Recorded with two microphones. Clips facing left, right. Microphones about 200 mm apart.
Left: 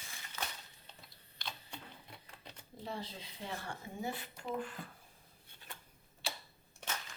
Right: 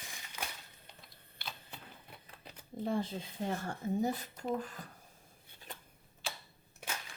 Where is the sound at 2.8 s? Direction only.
50° right (ahead or behind).